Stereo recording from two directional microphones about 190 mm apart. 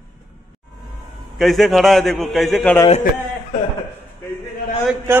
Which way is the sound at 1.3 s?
Centre (ahead or behind).